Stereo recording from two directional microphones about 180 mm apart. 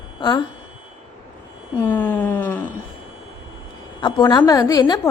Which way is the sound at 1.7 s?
10° left (ahead or behind).